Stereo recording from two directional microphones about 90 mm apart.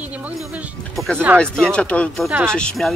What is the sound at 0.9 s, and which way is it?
Speech, 10° left (ahead or behind).